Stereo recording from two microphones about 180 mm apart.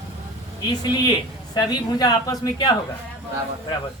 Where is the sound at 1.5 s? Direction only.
20° left (ahead or behind).